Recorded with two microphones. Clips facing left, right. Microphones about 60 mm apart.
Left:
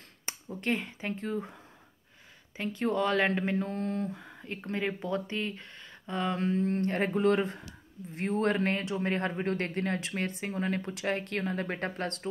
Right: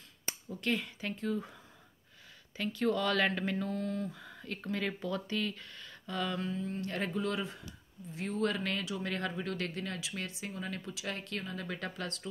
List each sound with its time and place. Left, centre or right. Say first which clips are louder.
0.5 s speech: left 3 dB; left
4.1 s speech: left 3 dB; left